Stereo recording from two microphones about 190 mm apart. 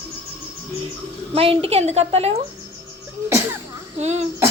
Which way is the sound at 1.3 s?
30° right (ahead or behind).